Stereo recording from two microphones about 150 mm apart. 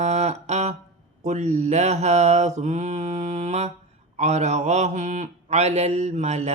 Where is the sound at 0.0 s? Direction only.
50° right (ahead or behind).